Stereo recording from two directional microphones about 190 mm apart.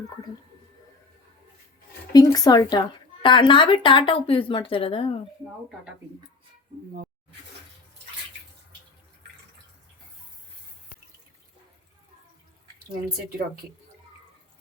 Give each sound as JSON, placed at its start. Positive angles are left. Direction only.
{"t": 2.1, "sound": "speech", "side_deg": 20}